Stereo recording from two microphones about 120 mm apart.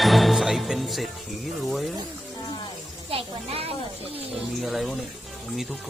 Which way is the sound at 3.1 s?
50° right (ahead or behind).